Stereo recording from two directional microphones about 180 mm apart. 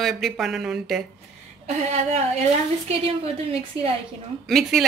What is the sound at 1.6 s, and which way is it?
A woman's voice, 40° right (ahead or behind).